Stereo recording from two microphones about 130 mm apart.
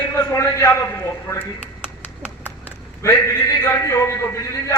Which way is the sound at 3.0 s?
20° left (ahead or behind).